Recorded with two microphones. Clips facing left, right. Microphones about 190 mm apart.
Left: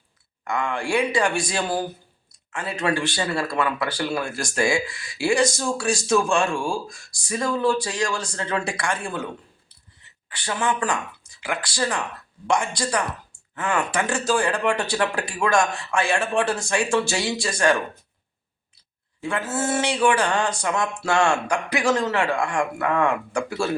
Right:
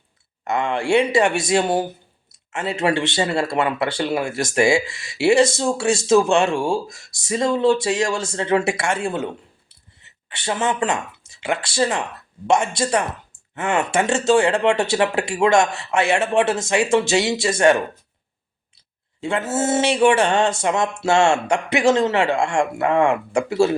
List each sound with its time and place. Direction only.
0.4 s speech: 25° right (ahead or behind)
19.2 s speech: 25° right (ahead or behind)